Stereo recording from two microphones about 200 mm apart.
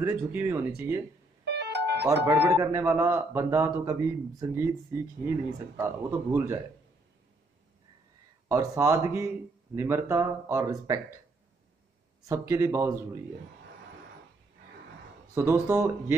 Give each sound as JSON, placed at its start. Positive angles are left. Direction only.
{"t": 0.1, "sound": "speech", "side_deg": -10}
{"t": 1.4, "sound": "music", "side_deg": -55}
{"t": 2.2, "sound": "speech", "side_deg": -15}
{"t": 8.5, "sound": "speech", "side_deg": -15}
{"t": 12.3, "sound": "speech", "side_deg": -15}
{"t": 15.6, "sound": "speech", "side_deg": -15}